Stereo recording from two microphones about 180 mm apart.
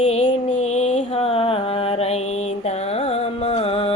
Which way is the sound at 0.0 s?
35° left (ahead or behind).